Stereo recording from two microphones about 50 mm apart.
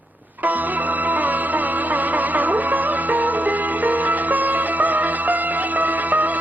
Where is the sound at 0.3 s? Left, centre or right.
Right.